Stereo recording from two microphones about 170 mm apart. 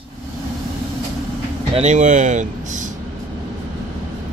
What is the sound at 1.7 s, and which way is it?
Speech, 40° right (ahead or behind).